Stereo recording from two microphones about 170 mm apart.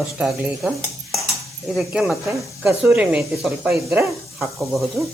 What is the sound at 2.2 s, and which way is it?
Stir, 15° right (ahead or behind).